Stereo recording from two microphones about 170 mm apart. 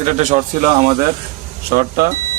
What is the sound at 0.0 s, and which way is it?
Speech, 45° right (ahead or behind).